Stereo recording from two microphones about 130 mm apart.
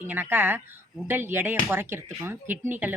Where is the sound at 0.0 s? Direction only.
15° right (ahead or behind).